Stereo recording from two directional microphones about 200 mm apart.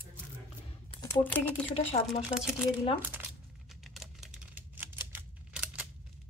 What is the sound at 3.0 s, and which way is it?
Crumpling, 10° right (ahead or behind).